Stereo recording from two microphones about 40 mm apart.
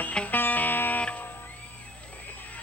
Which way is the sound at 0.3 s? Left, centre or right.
Left.